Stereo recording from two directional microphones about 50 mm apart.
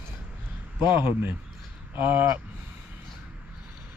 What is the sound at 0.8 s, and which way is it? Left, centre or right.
Speech, right.